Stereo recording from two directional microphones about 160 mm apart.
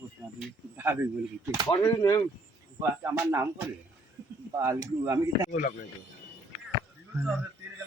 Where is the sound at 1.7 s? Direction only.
20° left (ahead or behind).